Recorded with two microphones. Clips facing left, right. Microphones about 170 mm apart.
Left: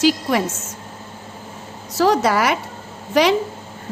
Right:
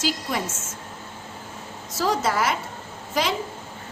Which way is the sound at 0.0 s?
65° left (ahead or behind).